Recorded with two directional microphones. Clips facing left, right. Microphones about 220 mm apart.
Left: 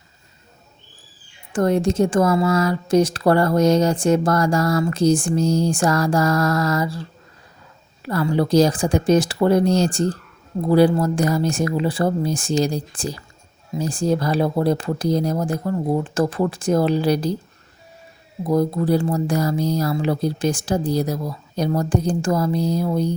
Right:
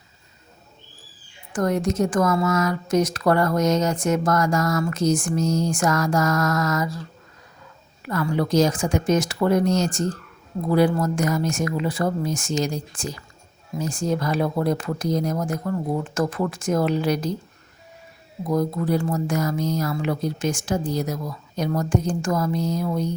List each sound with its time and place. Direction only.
1.5 s speech: 30° left (ahead or behind)
18.4 s speech: 30° left (ahead or behind)